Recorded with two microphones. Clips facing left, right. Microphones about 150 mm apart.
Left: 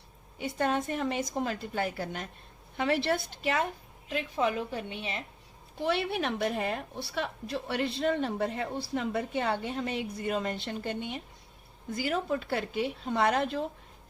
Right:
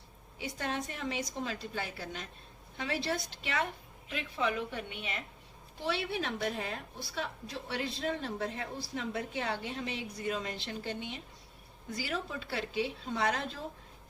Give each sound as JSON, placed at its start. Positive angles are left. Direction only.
{"t": 0.3, "sound": "a woman's voice", "side_deg": 55}
{"t": 3.4, "sound": "a woman's voice", "side_deg": 40}
{"t": 5.8, "sound": "a woman's voice", "side_deg": 60}